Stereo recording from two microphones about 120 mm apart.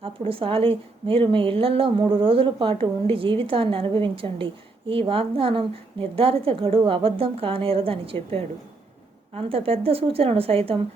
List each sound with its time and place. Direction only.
0.0 s a woman's voice: 50° right (ahead or behind)